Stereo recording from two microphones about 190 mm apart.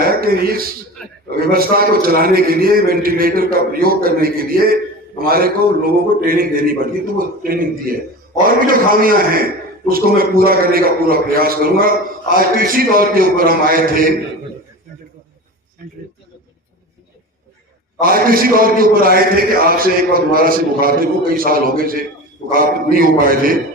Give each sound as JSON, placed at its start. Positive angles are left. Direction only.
{"t": 0.0, "sound": "a sound", "side_deg": -50}
{"t": 1.4, "sound": "a man's voice", "side_deg": -50}
{"t": 18.0, "sound": "a man's voice", "side_deg": -50}